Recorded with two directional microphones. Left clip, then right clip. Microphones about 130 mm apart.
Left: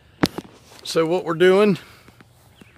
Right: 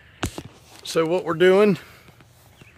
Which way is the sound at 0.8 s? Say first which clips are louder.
Left 1 dB; 55° left (ahead or behind).